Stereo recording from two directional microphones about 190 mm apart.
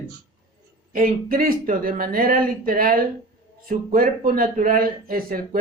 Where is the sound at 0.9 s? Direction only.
50° right (ahead or behind).